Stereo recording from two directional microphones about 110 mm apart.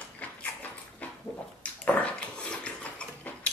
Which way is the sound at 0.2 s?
15° left (ahead or behind).